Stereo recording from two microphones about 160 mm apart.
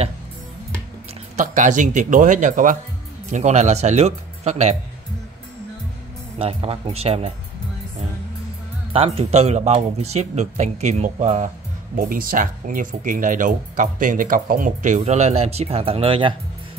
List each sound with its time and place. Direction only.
1.3 s speech: 50° right (ahead or behind)
6.3 s speech: 35° right (ahead or behind)
8.9 s speech: 35° right (ahead or behind)